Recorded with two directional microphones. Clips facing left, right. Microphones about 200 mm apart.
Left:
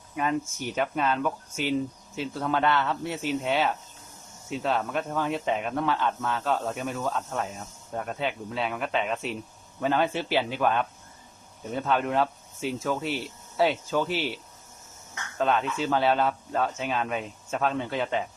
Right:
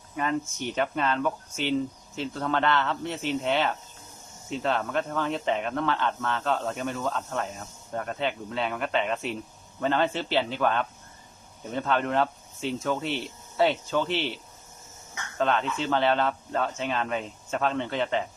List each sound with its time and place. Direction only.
0.2 s speech: 5° left (ahead or behind)
15.4 s speech: 5° left (ahead or behind)